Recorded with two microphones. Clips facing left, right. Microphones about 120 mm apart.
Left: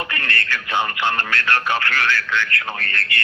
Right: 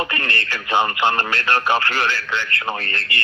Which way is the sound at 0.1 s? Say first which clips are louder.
Right 1 dB; 25° right (ahead or behind).